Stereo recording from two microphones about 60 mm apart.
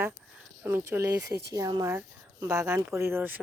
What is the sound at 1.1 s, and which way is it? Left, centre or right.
Speech, right.